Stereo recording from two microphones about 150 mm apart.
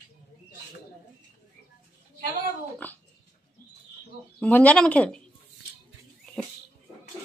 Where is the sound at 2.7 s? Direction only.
10° left (ahead or behind).